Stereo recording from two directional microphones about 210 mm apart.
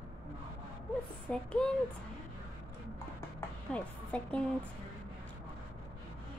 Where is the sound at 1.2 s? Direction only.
5° left (ahead or behind).